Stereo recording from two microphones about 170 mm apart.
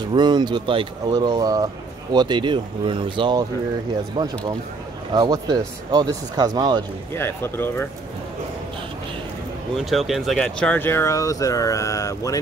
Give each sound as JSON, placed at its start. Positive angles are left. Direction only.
{"t": 0.1, "sound": "speech", "side_deg": -25}
{"t": 7.2, "sound": "speech", "side_deg": 15}
{"t": 9.8, "sound": "speech", "side_deg": 0}